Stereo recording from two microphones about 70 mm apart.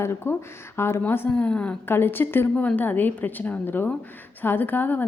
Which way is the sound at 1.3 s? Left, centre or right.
Centre.